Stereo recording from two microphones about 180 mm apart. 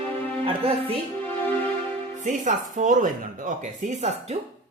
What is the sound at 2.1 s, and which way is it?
Speech, 45° right (ahead or behind).